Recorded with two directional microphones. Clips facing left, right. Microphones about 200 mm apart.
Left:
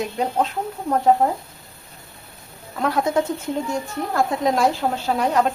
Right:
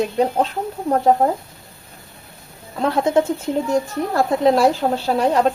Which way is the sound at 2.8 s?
25° right (ahead or behind).